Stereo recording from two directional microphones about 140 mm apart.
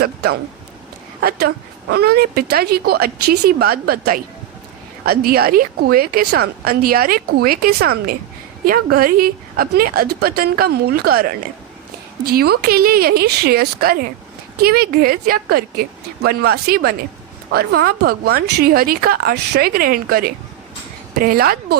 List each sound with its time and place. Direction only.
1.2 s a woman's voice: 90° right